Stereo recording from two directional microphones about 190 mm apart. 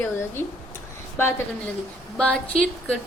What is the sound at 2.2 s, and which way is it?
Speech, 5° left (ahead or behind).